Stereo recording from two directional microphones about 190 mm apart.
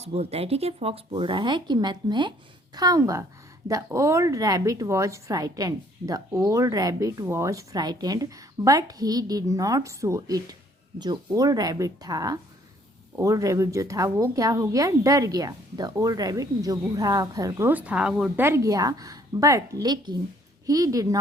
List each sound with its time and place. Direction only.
0.0 s a woman's voice: 35° right (ahead or behind); by 21.2 s 20° right (ahead or behind)